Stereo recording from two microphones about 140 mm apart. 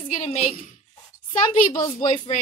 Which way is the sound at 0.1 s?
55° left (ahead or behind).